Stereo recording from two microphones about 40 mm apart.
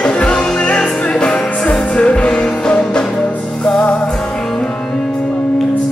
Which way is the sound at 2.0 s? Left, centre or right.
Left.